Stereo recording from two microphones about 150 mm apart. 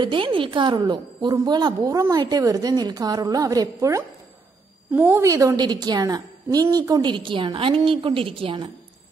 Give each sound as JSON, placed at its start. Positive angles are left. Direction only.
{"t": 0.0, "sound": "a woman's voice", "side_deg": -35}